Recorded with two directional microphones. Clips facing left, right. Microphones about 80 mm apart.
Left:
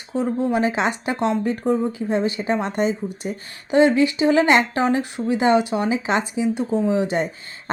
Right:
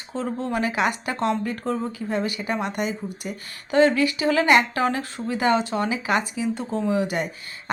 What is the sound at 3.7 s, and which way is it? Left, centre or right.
Speech, left.